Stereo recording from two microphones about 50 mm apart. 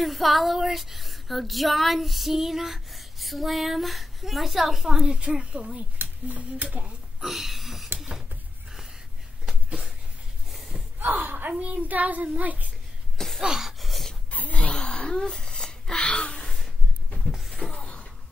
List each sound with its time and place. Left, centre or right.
0.0 s female singing: centre; by 5.9 s right
6.2 s speech: right
7.2 s speech: centre
10.5 s gasp: centre
11.0 s speech: right
11.6 s child singing: right
13.4 s a sound: centre
14.3 s gasp: left
16.3 s gasp: centre
17.3 s a sound: centre